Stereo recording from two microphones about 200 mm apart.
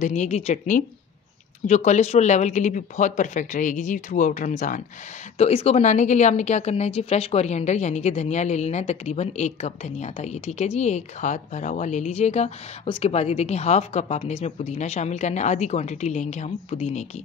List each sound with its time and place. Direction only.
0.0 s a woman's voice: 35° left (ahead or behind)